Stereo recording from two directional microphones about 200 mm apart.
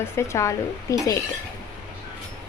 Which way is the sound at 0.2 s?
15° left (ahead or behind).